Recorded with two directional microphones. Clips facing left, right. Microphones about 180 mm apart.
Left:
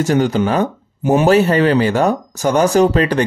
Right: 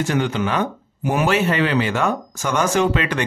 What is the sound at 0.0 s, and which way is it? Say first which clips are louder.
Speech: left 6 dB; 40° left (ahead or behind).